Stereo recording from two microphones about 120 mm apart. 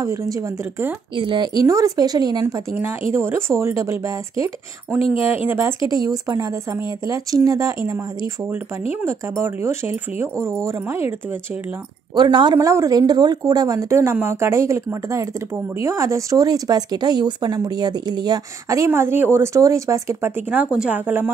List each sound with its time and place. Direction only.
0.0 s speech: 25° right (ahead or behind)
1.1 s speech: 40° right (ahead or behind)
2.4 s speech: 20° right (ahead or behind)
5.5 s speech: 20° right (ahead or behind)
5.9 s speech: 30° right (ahead or behind)
12.2 s speech: 40° right (ahead or behind)
12.5 s speech: 25° right (ahead or behind)
18.9 s speech: 20° right (ahead or behind)